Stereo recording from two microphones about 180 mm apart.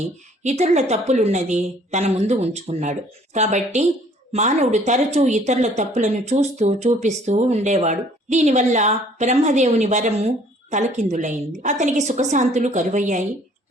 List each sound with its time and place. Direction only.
0.0 s a woman's voice: 40° right (ahead or behind)